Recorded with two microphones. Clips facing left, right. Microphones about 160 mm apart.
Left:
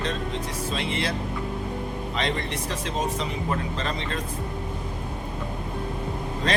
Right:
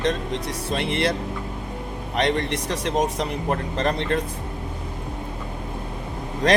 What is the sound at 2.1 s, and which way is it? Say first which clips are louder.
A man's voice: right 7 dB; 70° right (ahead or behind).